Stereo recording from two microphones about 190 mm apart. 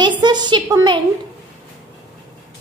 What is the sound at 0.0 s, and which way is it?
A woman's voice, 25° right (ahead or behind).